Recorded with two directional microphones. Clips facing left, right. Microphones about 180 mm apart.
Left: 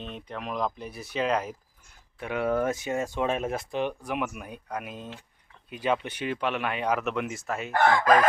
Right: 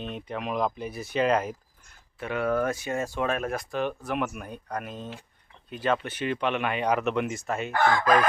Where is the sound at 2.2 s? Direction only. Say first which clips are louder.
Even; 15° left (ahead or behind).